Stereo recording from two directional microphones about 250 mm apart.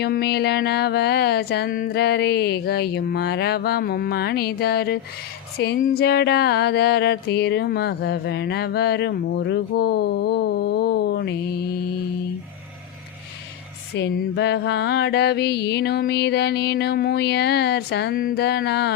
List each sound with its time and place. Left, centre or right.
0.0 s music: left
13.9 s music: left